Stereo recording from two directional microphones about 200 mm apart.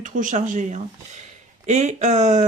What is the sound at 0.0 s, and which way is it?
Speech, 40° right (ahead or behind).